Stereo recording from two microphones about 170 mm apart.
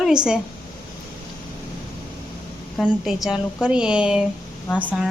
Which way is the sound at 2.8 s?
Centre (ahead or behind).